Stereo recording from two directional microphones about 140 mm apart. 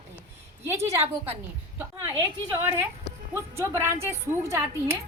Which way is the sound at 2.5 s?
15° right (ahead or behind).